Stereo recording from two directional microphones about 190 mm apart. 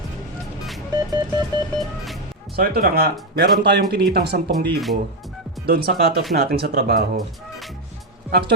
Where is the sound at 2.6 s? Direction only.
50° right (ahead or behind).